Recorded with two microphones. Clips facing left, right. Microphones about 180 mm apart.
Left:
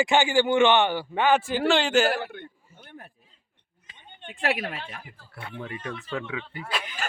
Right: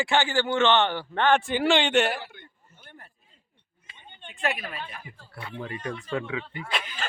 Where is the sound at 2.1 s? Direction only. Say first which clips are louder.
Left 7 dB; 60° left (ahead or behind).